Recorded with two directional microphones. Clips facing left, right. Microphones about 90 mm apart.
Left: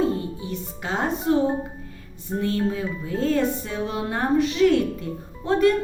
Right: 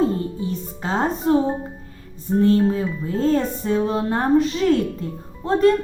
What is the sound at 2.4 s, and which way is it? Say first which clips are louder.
Music: right 7 dB; 30° right (ahead or behind).